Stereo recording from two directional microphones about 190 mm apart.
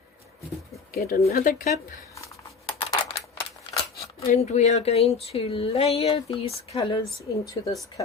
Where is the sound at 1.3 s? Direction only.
50° left (ahead or behind).